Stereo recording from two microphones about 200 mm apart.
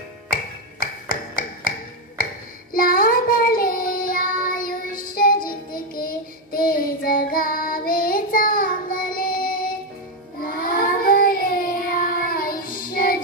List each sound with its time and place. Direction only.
0.3 s music: 45° left (ahead or behind)
2.7 s child singing: 45° left (ahead or behind)